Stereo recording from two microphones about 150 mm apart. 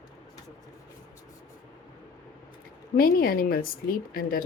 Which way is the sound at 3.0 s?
80° left.